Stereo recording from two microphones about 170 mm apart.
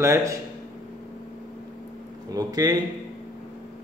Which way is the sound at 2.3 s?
20° right (ahead or behind).